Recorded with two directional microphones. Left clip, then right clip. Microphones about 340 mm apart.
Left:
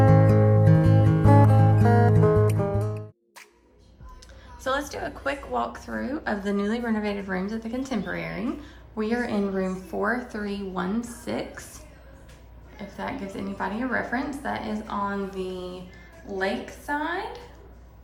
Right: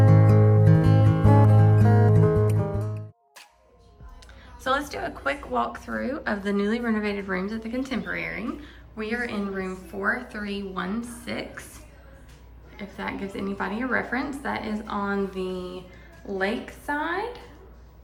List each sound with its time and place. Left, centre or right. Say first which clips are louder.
0.0 s music: left 2 dB; centre
4.6 s a woman's voice: right 2 dB; centre
12.7 s a woman's voice: even; centre